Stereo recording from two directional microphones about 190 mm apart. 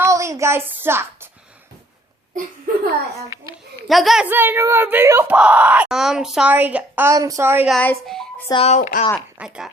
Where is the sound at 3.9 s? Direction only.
Centre (ahead or behind).